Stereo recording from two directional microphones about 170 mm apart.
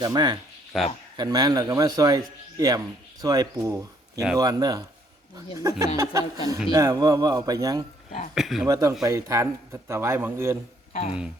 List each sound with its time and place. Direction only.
0.0 s a man's voice: 25° right (ahead or behind)
0.7 s speech: centre (ahead or behind)
1.1 s a man's voice: 25° right (ahead or behind)
6.0 s a man's voice: 20° right (ahead or behind)
8.4 s speech: centre (ahead or behind)
8.6 s a man's voice: 20° right (ahead or behind)
10.9 s speech: 35° left (ahead or behind)